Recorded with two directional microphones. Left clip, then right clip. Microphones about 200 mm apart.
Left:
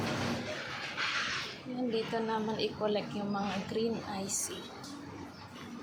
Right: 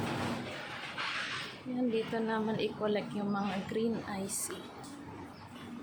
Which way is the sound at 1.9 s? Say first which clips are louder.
Left 2 dB; 20° right (ahead or behind).